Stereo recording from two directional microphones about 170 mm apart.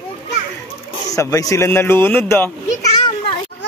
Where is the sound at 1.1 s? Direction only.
20° left (ahead or behind).